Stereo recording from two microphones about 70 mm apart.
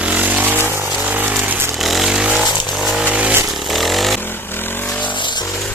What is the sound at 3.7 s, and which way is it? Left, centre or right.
Chainsaw, centre.